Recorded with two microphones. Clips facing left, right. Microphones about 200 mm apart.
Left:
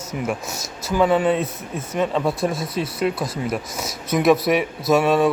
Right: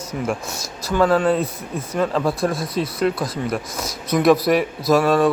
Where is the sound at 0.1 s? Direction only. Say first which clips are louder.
Right 1 dB; 5° left (ahead or behind).